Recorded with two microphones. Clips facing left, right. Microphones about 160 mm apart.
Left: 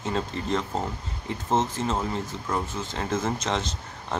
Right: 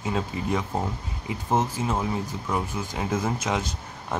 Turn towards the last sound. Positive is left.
turn(degrees=-10)  # may be behind; listen again after turning